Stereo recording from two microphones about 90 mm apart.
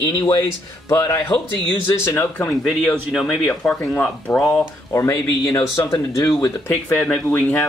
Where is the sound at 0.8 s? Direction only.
35° left (ahead or behind).